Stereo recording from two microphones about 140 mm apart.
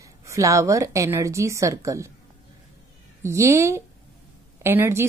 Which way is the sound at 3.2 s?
20° right (ahead or behind).